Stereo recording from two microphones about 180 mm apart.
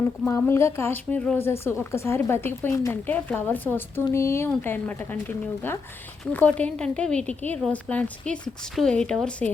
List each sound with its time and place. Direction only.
0.3 s a woman's voice: 15° left (ahead or behind)